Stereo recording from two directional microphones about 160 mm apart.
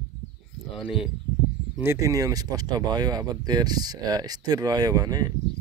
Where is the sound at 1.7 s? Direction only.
15° right (ahead or behind).